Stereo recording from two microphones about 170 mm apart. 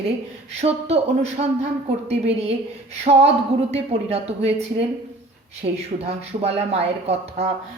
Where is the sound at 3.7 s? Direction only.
35° right (ahead or behind).